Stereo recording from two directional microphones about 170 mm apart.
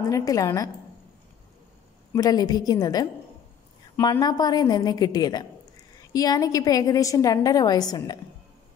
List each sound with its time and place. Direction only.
0.0 s a woman's voice: 20° left (ahead or behind)
2.1 s a woman's voice: 20° left (ahead or behind)